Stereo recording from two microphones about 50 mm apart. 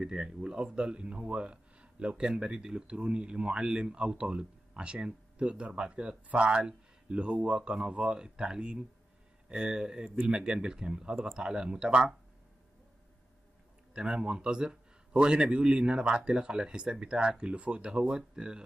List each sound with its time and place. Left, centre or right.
0.0 s a man's voice: centre
13.9 s a man's voice: centre